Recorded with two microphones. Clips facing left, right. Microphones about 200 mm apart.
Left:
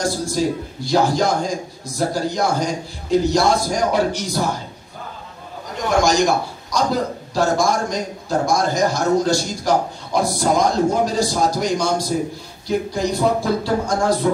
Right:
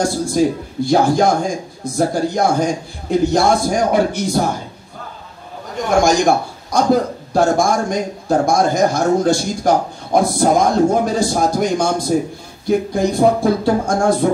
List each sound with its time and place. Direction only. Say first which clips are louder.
0.3 s a man's voice: right 4 dB; 50° right (ahead or behind)
5.9 s a man's voice: right 3 dB; 50° right (ahead or behind)